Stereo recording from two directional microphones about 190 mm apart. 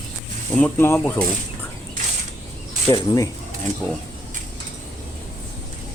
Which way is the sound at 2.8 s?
20° left (ahead or behind).